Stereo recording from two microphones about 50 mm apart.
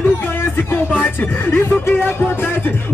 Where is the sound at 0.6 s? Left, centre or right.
Left.